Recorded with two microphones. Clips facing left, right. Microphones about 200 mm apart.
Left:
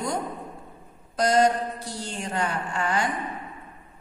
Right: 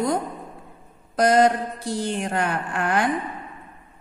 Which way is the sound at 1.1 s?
55° right (ahead or behind).